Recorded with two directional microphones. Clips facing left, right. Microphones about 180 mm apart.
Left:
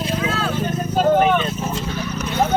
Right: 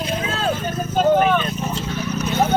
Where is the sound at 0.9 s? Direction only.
Centre (ahead or behind).